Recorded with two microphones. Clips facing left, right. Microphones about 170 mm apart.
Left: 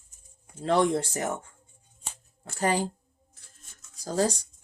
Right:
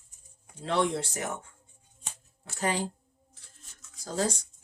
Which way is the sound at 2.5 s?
40° left (ahead or behind).